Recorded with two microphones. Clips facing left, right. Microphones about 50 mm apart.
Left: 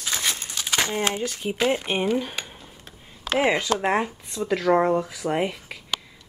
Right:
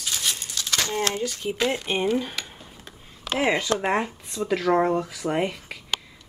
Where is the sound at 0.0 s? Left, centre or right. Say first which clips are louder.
Left 2 dB; left.